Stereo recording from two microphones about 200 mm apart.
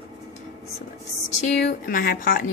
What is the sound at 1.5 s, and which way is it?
Speech, 45° left (ahead or behind).